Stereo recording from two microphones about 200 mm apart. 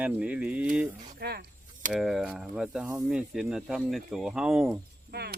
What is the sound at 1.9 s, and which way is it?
Speech, centre (ahead or behind).